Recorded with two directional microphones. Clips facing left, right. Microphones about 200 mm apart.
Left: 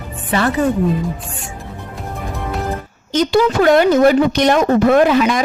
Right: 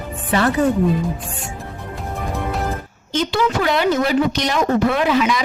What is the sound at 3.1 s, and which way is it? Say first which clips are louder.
Speech: left 5 dB; 40° left (ahead or behind).